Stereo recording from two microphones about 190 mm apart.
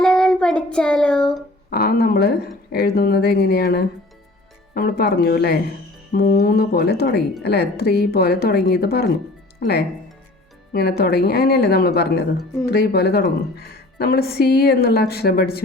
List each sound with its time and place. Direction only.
0.0 s child singing: 5° left (ahead or behind)
1.7 s a woman's voice: 55° left (ahead or behind)